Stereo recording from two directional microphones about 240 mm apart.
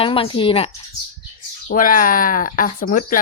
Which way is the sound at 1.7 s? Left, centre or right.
Left.